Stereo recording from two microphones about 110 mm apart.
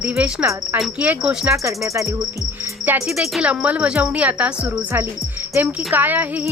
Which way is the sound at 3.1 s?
5° right (ahead or behind).